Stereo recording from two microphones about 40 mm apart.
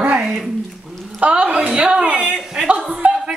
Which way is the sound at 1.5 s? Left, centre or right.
Right.